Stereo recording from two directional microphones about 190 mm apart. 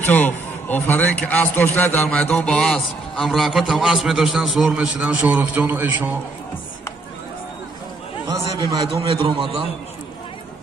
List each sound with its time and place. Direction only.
0.0 s a man's voice: 10° left (ahead or behind); by 6.1 s 10° right (ahead or behind)
8.5 s a man's voice: 25° right (ahead or behind)